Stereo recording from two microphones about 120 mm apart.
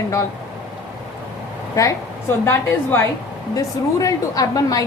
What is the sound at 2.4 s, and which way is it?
A woman's voice, 20° left (ahead or behind).